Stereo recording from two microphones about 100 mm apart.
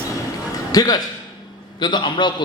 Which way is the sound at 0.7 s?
40° left (ahead or behind).